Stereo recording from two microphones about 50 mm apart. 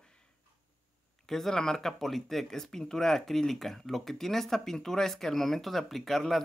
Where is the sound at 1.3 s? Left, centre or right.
Centre.